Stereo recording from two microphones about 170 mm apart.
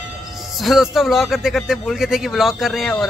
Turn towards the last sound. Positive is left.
turn(degrees=0)  # may be behind; listen again after turning